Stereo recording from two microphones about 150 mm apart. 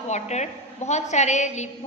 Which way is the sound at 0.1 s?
50° left (ahead or behind).